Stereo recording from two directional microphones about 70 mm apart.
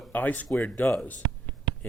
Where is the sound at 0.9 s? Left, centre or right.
Centre.